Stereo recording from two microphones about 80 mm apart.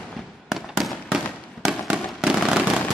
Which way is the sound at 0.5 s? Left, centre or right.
Centre.